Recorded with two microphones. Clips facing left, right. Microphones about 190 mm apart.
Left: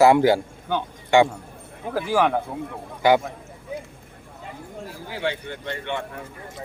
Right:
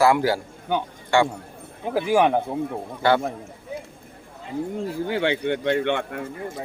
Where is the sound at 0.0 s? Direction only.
20° left (ahead or behind).